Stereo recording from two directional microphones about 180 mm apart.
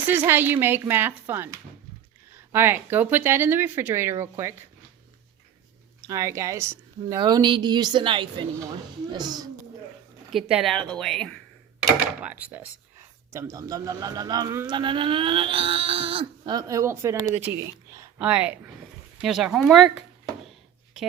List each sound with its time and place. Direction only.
0.3 s speech: 10° right (ahead or behind)
6.0 s speech: 15° right (ahead or behind)
10.3 s speech: centre (ahead or behind)
12.2 s speech: 10° right (ahead or behind)
14.8 s speech: 25° right (ahead or behind); by 18.6 s 10° right (ahead or behind)
19.2 s a sound: centre (ahead or behind)